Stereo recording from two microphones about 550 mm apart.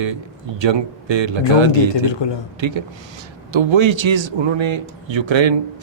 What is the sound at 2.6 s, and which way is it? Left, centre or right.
A man's voice, right.